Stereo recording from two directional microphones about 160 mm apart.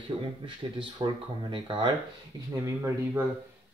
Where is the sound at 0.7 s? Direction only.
30° right (ahead or behind).